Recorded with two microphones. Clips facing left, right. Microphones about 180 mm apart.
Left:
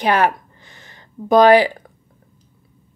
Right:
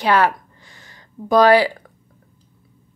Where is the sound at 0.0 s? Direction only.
20° left (ahead or behind).